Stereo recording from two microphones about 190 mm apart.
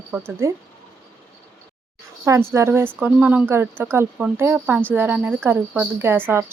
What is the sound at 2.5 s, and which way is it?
Speech, 15° right (ahead or behind).